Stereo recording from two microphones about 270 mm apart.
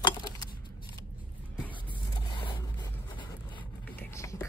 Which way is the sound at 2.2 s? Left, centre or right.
Centre.